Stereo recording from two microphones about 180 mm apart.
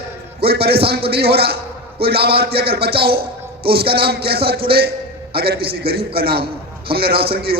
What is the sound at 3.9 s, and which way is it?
A man's voice, 60° right (ahead or behind).